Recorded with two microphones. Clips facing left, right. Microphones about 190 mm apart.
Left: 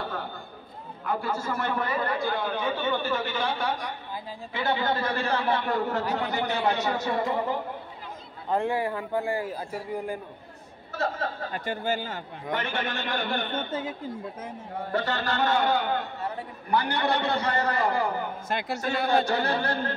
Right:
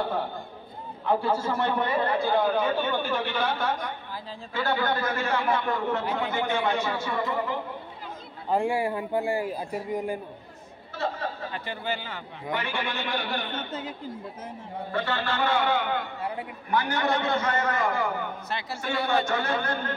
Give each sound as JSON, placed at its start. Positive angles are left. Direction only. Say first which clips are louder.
{"t": 1.0, "sound": "a man's voice", "louder": "right 4 dB", "side_deg": -25}
{"t": 2.8, "sound": "speech", "louder": "even", "side_deg": -10}
{"t": 4.6, "sound": "a man's voice", "louder": "even", "side_deg": 20}
{"t": 8.5, "sound": "speech", "louder": "right 1 dB", "side_deg": -10}
{"t": 11.0, "sound": "speech", "louder": "left 1 dB", "side_deg": 45}
{"t": 14.9, "sound": "a man's voice", "louder": "left 1 dB", "side_deg": 40}
{"t": 16.2, "sound": "speech", "louder": "right 1 dB", "side_deg": -15}
{"t": 16.7, "sound": "a man's voice", "louder": "even", "side_deg": 35}
{"t": 18.5, "sound": "speech", "louder": "left 4 dB", "side_deg": 50}
{"t": 19.0, "sound": "a man's voice", "louder": "left 2 dB", "side_deg": 35}